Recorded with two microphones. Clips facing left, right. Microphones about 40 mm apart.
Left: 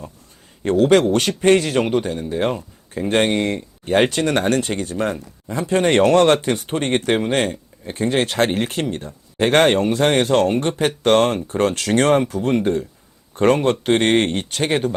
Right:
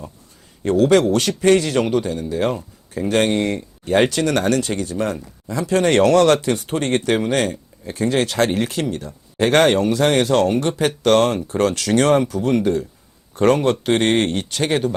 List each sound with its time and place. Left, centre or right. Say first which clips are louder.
0.6 s speech: even; left